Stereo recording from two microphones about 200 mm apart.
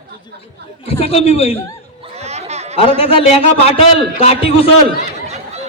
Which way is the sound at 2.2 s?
35° right (ahead or behind).